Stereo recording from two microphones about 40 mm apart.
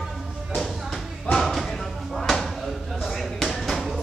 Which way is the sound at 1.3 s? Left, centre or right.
Left.